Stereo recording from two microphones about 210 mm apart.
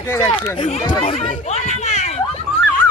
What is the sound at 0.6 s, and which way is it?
Chatter, 20° left (ahead or behind).